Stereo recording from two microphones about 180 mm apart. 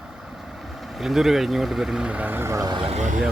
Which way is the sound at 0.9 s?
Centre (ahead or behind).